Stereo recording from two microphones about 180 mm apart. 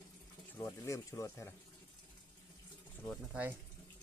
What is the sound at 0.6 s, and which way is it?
Speech, 15° left (ahead or behind).